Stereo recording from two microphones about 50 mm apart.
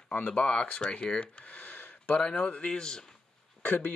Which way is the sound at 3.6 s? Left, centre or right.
Left.